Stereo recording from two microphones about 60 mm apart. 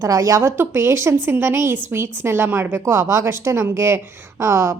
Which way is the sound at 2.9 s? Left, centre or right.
Right.